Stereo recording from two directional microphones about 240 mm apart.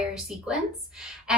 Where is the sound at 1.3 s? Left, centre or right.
Centre.